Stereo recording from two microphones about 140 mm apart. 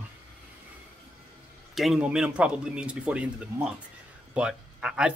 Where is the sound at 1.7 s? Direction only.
5° right (ahead or behind).